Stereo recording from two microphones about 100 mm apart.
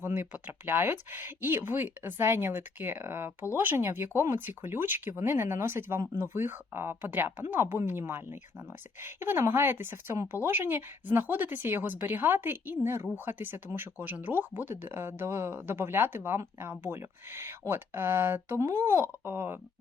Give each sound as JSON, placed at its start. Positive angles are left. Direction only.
{"t": 0.0, "sound": "speech", "side_deg": -20}